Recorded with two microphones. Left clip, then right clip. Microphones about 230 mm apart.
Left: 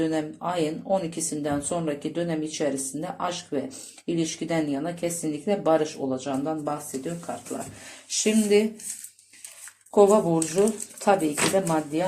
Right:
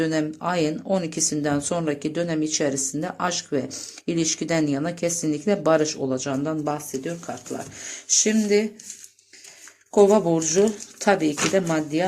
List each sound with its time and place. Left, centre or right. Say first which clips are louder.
0.0 s speech: right 3 dB; right
8.0 s speech: right 3 dB; right
9.9 s speech: right 1 dB; right